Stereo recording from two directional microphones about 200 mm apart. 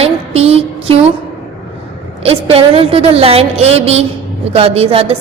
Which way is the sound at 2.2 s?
30° right (ahead or behind).